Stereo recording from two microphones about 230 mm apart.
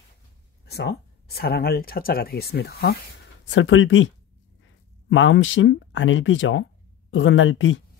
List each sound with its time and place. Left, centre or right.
0.7 s speech: left
3.4 s speech: left
5.1 s speech: left